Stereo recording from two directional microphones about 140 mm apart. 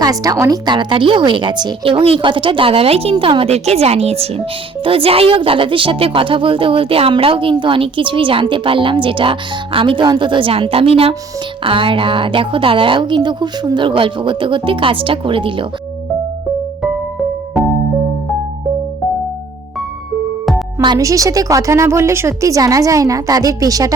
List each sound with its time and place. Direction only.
0.0 s a woman's voice: 25° right (ahead or behind)
20.8 s a woman's voice: 25° right (ahead or behind)